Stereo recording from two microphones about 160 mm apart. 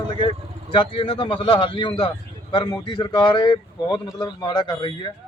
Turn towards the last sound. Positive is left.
turn(degrees=30)  # may be behind; listen again after turning